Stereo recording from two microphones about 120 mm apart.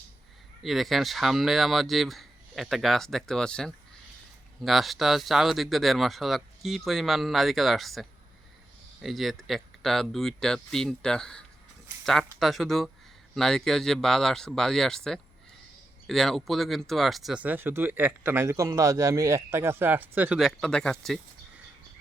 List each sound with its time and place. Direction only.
0.6 s speech: centre (ahead or behind)
17.4 s a man's voice: 15° right (ahead or behind)
20.4 s speech: 5° left (ahead or behind)